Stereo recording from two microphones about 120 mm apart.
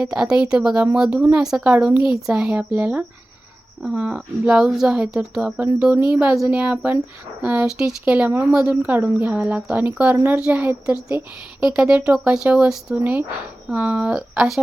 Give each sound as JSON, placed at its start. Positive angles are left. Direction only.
{"t": 0.0, "sound": "speech", "side_deg": -5}
{"t": 12.2, "sound": "speech", "side_deg": -10}